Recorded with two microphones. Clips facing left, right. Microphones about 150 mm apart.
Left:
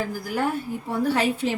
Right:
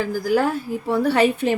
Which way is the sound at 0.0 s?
90° right.